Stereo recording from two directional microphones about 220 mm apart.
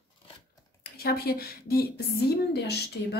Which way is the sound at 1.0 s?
45° left (ahead or behind).